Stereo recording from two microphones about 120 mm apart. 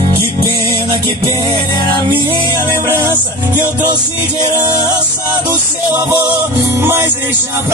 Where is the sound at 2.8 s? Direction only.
20° right (ahead or behind).